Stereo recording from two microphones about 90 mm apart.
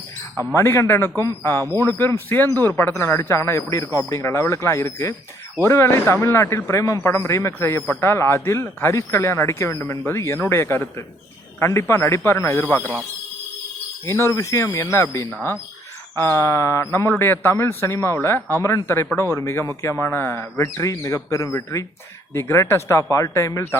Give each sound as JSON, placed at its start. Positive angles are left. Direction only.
{"t": 0.3, "sound": "a man's voice", "side_deg": 30}
{"t": 14.0, "sound": "a man's voice", "side_deg": 30}
{"t": 20.8, "sound": "a man's voice", "side_deg": 35}